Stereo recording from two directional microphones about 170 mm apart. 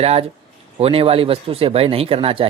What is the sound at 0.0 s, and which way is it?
A man's voice, 35° right (ahead or behind).